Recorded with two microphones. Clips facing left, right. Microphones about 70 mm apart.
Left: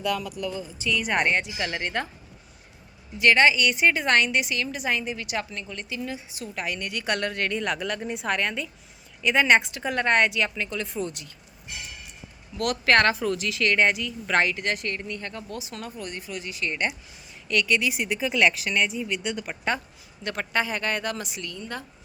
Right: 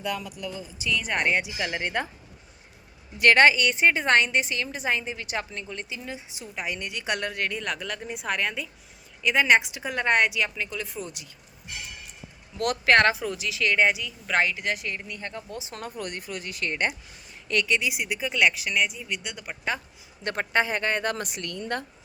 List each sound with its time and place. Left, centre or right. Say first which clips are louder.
0.0 s speech: left 4 dB; centre
0.9 s a woman's voice: left 2 dB; centre
1.4 s speech: even; centre
3.2 s speech: right 1 dB; right
3.6 s a woman's voice: even; right; by 11.3 s centre
12.8 s a woman's voice: even; centre
15.2 s a woman's voice: left 1 dB; right
15.8 s speech: right 1 dB; right
17.7 s a woman's voice: left 2 dB; centre
20.2 s a woman's voice: right 2 dB; right
21.1 s speech: right 2 dB; right